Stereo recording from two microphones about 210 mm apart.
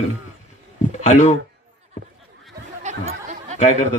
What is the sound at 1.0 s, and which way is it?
Speech, 35° left (ahead or behind).